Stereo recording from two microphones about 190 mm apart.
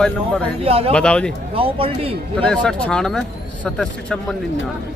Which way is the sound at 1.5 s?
30° right (ahead or behind).